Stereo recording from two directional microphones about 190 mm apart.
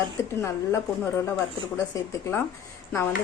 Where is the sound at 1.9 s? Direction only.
15° left (ahead or behind).